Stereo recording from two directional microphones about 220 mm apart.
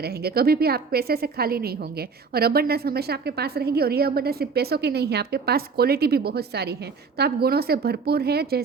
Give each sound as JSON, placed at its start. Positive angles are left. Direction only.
{"t": 0.0, "sound": "a woman's voice", "side_deg": -45}